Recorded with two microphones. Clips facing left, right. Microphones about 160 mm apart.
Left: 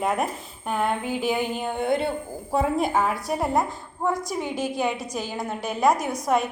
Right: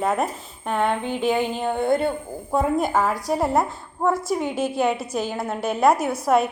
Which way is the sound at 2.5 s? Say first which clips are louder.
Right 2 dB; centre (ahead or behind).